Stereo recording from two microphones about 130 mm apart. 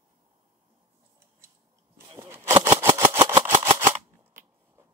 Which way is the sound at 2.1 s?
20° right (ahead or behind).